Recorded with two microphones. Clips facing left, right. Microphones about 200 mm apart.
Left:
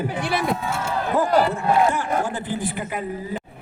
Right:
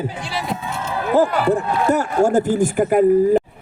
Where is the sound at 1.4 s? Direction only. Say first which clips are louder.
Right 1 dB; 50° right (ahead or behind).